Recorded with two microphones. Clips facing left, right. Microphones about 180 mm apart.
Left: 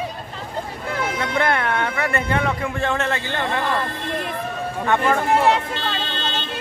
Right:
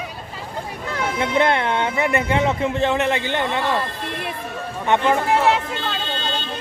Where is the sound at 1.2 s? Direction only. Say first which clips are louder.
Right 4 dB; 20° right (ahead or behind).